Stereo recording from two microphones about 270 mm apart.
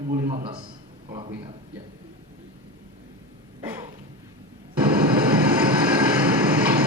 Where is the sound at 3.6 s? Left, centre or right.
Centre.